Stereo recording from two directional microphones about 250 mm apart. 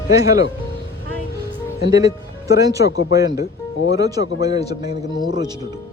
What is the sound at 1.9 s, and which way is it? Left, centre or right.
A man's voice, centre.